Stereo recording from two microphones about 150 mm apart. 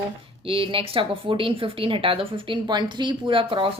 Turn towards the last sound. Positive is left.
turn(degrees=-35)  # may be behind; listen again after turning